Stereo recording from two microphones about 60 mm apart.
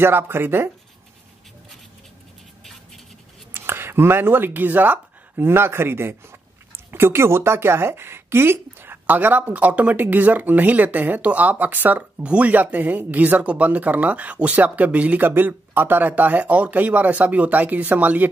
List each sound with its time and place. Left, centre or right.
0.0 s speech: right
3.5 s speech: right